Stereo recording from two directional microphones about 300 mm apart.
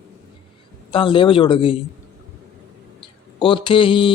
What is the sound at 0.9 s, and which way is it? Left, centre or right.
Speech, centre.